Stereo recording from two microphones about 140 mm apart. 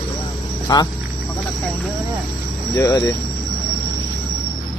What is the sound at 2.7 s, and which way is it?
Speech, 20° left (ahead or behind).